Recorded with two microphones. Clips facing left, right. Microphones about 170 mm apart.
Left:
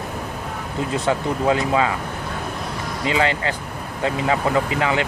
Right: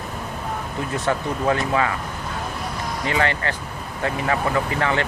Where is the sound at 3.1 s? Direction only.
15° left (ahead or behind).